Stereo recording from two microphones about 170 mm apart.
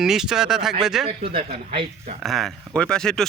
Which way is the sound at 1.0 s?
30° right (ahead or behind).